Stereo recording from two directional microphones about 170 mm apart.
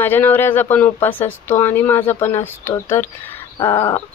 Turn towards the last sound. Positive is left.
turn(degrees=30)  # may be behind; listen again after turning